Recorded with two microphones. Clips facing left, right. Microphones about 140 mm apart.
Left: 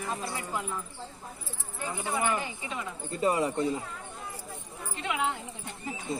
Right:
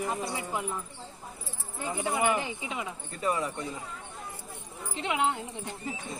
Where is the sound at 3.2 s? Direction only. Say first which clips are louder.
Left 4 dB; 30° left (ahead or behind).